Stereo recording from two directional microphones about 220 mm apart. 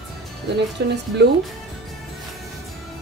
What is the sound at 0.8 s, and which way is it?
Speech, 50° right (ahead or behind).